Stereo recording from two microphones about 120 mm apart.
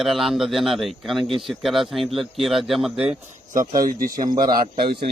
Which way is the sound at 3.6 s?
30° right (ahead or behind).